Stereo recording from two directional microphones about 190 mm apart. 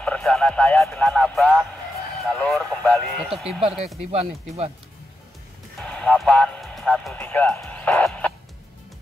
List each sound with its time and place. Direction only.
0.0 s speech: 5° left (ahead or behind)
2.2 s a sound: centre (ahead or behind)
4.0 s speech: 35° right (ahead or behind)
5.8 s music: 5° left (ahead or behind)